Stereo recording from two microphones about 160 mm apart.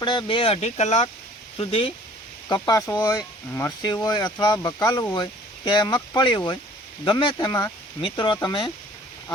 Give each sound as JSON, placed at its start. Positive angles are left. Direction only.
{"t": 0.0, "sound": "speech", "side_deg": 30}
{"t": 2.5, "sound": "speech", "side_deg": 20}